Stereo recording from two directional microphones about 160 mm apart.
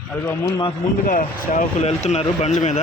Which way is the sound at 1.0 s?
55° left (ahead or behind).